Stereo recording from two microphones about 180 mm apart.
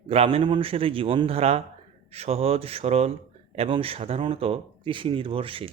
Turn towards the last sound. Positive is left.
turn(degrees=-30)  # may be behind; listen again after turning